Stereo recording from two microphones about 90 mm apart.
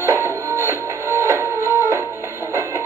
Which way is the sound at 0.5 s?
30° right (ahead or behind).